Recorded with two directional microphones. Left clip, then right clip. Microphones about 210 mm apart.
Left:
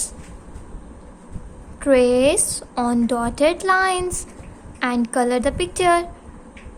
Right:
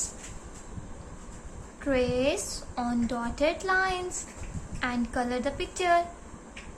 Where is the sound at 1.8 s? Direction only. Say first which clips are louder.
Left 12 dB; 55° left (ahead or behind).